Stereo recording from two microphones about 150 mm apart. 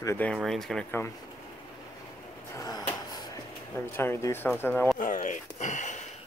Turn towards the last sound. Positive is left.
turn(degrees=50)  # may be behind; listen again after turning